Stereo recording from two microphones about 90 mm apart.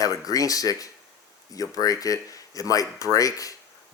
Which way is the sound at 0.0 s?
40° left (ahead or behind).